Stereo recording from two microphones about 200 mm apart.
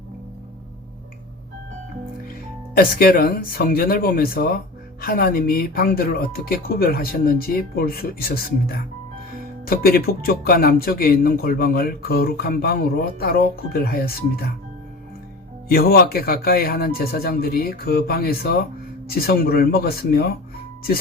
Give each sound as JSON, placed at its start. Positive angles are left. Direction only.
{"t": 2.7, "sound": "speech", "side_deg": 50}
{"t": 9.6, "sound": "speech", "side_deg": 50}
{"t": 15.7, "sound": "speech", "side_deg": 50}